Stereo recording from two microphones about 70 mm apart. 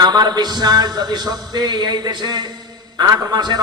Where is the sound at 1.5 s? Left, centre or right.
Right.